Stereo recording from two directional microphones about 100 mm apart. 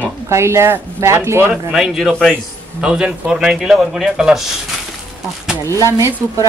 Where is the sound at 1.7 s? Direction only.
Centre (ahead or behind).